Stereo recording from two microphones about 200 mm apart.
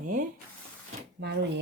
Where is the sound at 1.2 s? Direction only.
60° right (ahead or behind).